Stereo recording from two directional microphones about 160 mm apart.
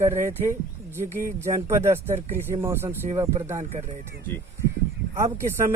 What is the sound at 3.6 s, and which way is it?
Speech, 45° right (ahead or behind).